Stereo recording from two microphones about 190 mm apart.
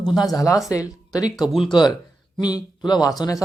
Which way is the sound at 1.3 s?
Centre (ahead or behind).